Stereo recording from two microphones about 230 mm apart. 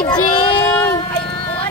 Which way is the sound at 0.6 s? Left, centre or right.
Centre.